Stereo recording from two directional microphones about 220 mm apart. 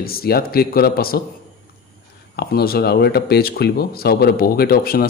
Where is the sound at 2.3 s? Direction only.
45° left (ahead or behind).